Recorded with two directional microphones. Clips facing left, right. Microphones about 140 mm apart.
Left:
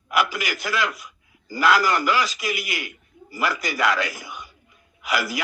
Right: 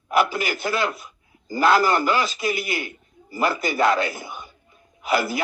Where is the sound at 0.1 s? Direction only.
30° right (ahead or behind).